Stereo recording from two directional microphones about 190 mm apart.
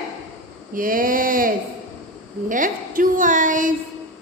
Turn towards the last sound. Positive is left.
turn(degrees=-45)  # may be behind; listen again after turning